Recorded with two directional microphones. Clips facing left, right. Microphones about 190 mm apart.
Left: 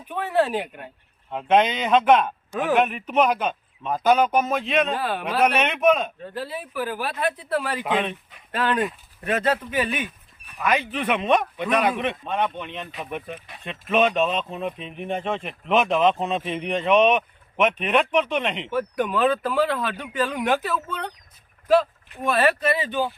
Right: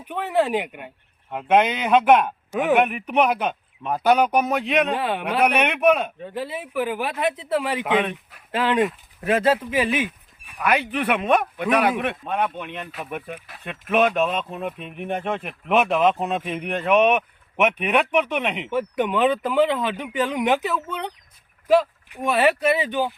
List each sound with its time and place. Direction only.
0.0 s speech: 15° right (ahead or behind)
7.9 s speech: 5° right (ahead or behind)
8.5 s speech: 25° right (ahead or behind)
10.4 s speech: 10° right (ahead or behind)
18.7 s speech: 20° right (ahead or behind)